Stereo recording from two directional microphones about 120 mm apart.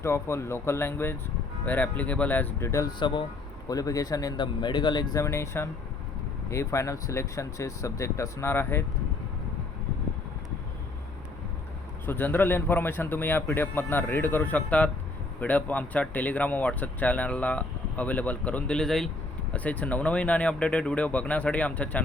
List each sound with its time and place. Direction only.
0.0 s speech: 20° left (ahead or behind)
3.0 s speech: 40° left (ahead or behind)
3.7 s speech: 30° left (ahead or behind)
5.2 s speech: 20° left (ahead or behind)
12.0 s speech: 15° left (ahead or behind)